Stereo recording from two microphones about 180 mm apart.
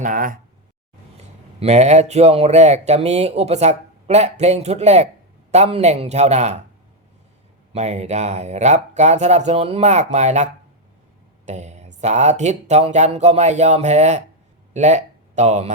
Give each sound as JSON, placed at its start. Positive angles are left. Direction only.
{"t": 0.0, "sound": "a sound", "side_deg": -45}
{"t": 1.5, "sound": "speech", "side_deg": -35}
{"t": 7.7, "sound": "speech", "side_deg": -40}